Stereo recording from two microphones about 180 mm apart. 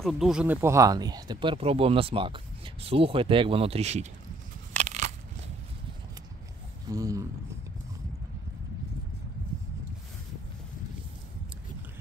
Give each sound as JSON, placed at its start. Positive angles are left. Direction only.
{"t": 0.0, "sound": "speech", "side_deg": 0}
{"t": 4.7, "sound": "crushing", "side_deg": -40}
{"t": 6.9, "sound": "speech", "side_deg": -20}